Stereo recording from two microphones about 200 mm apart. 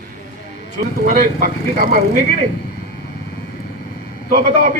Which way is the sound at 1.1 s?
45° right (ahead or behind).